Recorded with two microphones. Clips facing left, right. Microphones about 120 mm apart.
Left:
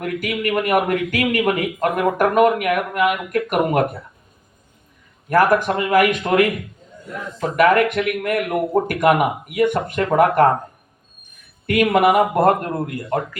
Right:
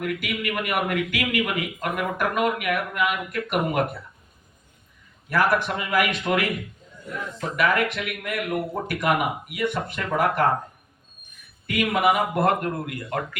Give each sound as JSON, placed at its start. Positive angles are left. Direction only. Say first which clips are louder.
{"t": 0.0, "sound": "a man's voice", "louder": "left 5 dB", "side_deg": 45}
{"t": 5.3, "sound": "a man's voice", "louder": "left 6 dB", "side_deg": 45}
{"t": 7.5, "sound": "a man's voice", "louder": "left 8 dB", "side_deg": 50}
{"t": 11.6, "sound": "a man's voice", "louder": "left 6 dB", "side_deg": 60}